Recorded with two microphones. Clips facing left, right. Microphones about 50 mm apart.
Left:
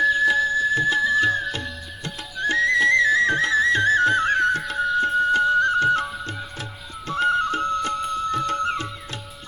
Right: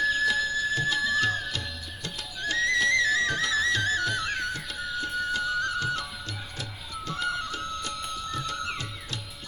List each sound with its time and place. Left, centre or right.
0.0 s music: centre
0.3 s music: left
1.3 s music: centre
2.6 s music: left